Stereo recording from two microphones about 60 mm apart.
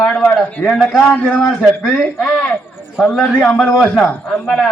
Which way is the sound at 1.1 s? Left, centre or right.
Left.